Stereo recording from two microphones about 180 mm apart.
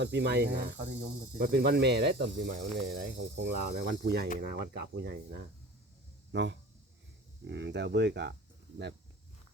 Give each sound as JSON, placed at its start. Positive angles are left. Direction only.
{"t": 0.0, "sound": "speech", "side_deg": -75}
{"t": 2.7, "sound": "speech", "side_deg": -65}
{"t": 6.3, "sound": "speech", "side_deg": -75}